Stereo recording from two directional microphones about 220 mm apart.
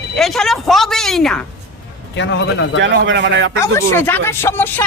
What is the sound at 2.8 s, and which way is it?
Speech, 55° right (ahead or behind).